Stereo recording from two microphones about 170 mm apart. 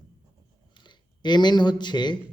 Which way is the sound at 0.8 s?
25° left (ahead or behind).